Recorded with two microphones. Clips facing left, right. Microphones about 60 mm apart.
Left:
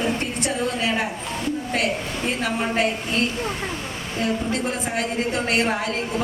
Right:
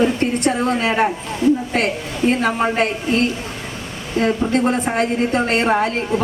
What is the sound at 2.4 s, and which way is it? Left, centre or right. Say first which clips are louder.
Speech: right 5 dB; right.